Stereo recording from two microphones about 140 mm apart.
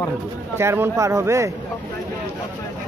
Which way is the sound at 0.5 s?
20° right (ahead or behind).